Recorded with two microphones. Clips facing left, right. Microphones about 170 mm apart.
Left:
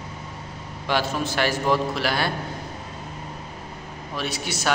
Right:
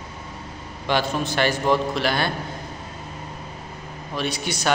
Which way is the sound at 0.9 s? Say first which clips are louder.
Right 1 dB; 5° left (ahead or behind).